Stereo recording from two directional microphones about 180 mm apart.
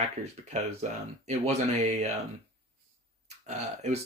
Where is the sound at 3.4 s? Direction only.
40° right (ahead or behind).